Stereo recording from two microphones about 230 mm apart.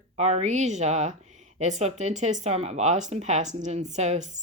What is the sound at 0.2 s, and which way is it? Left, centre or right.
Speech, right.